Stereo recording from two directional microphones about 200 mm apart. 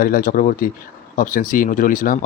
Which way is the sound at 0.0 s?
45° left (ahead or behind).